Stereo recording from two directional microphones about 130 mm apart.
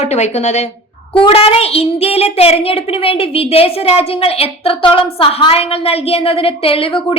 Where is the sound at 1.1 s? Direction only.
45° left (ahead or behind).